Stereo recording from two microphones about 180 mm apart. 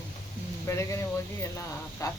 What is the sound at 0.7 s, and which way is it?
Speech, 15° left (ahead or behind).